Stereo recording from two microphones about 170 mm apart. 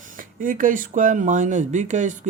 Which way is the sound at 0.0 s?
50° right (ahead or behind).